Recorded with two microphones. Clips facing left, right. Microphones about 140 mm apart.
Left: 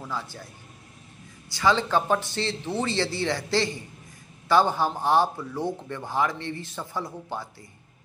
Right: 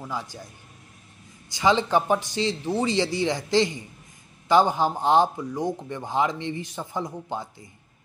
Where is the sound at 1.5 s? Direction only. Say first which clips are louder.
Right 2 dB; 20° right (ahead or behind).